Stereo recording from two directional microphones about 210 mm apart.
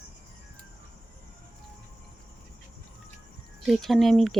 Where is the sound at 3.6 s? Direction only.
Centre (ahead or behind).